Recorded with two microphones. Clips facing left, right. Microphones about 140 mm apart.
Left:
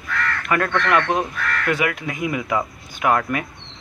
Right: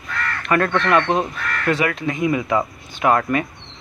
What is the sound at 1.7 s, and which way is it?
Speech, 5° left (ahead or behind).